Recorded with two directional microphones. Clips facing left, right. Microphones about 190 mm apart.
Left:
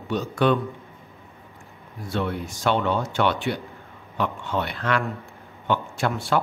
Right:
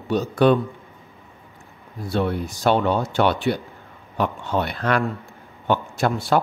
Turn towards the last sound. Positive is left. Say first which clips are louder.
# right 3 dB
turn(degrees=-40)  # may be behind; listen again after turning